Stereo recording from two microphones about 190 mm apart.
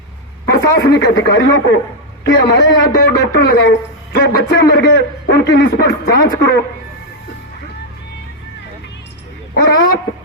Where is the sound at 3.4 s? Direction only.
60° left (ahead or behind).